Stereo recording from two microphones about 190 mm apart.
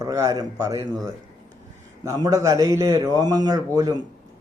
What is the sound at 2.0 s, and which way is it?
A man's voice, 20° right (ahead or behind).